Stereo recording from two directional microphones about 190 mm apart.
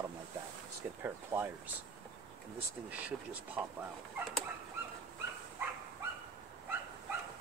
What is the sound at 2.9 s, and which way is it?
Speech, 10° right (ahead or behind).